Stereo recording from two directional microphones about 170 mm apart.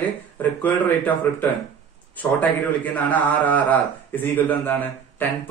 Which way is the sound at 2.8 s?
10° left (ahead or behind).